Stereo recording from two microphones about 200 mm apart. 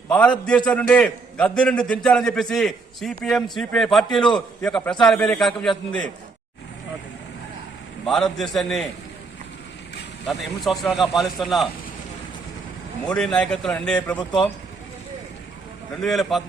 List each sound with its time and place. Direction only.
0.1 s a man's voice: 5° left (ahead or behind)
4.2 s a man's voice: 20° left (ahead or behind)
4.6 s a man's voice: 5° left (ahead or behind)
8.0 s a man's voice: centre (ahead or behind)
10.2 s a man's voice: centre (ahead or behind)
13.1 s a man's voice: 5° left (ahead or behind)
16.0 s a man's voice: centre (ahead or behind)